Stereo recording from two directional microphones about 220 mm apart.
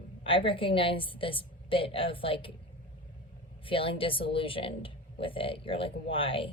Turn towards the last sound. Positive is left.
turn(degrees=25)  # may be behind; listen again after turning